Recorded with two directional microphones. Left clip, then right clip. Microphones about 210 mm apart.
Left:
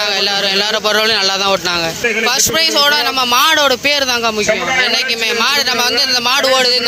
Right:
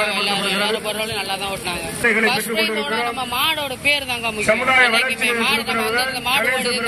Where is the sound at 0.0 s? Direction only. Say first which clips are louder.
Left 5 dB; 40° left (ahead or behind).